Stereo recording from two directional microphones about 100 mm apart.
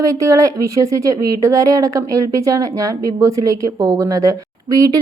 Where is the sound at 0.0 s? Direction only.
35° right (ahead or behind).